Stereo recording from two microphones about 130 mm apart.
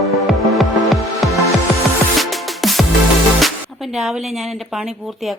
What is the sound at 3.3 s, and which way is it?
Speech, centre (ahead or behind).